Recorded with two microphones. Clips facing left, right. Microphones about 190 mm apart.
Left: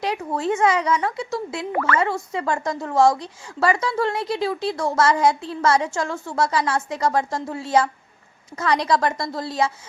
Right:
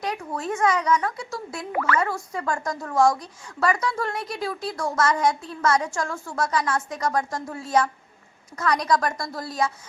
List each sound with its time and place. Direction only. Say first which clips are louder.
0.0 s a woman's voice: left 5 dB; 30° left (ahead or behind)
1.7 s speech: left 2 dB; 5° right (ahead or behind)
2.0 s a woman's voice: left 3 dB; 25° left (ahead or behind)